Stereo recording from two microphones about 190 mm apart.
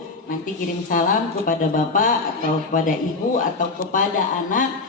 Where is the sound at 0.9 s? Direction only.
45° left (ahead or behind).